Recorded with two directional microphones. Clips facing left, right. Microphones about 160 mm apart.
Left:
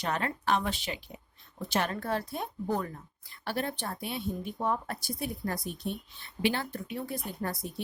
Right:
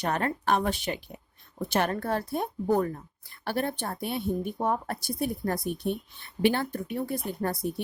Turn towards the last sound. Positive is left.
turn(degrees=-50)  # may be behind; listen again after turning